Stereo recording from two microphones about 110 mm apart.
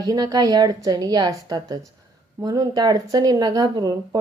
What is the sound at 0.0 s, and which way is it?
Speech, 35° right (ahead or behind).